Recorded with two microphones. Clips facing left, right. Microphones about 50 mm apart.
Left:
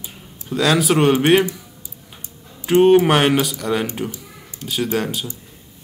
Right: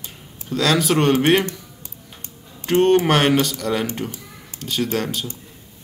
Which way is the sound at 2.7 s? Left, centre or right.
Centre.